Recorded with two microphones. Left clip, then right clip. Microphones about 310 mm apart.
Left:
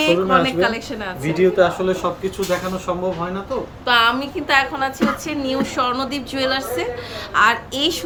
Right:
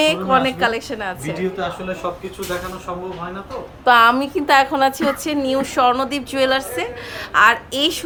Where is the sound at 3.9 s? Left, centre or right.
Centre.